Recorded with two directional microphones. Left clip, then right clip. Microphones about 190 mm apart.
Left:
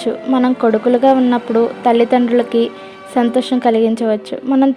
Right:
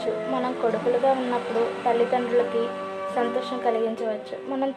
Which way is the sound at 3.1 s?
40° left (ahead or behind).